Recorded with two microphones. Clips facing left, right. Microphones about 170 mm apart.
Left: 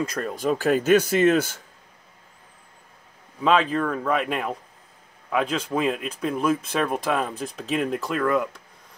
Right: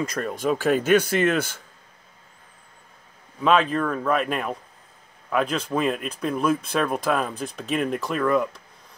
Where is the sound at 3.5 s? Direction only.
30° left (ahead or behind).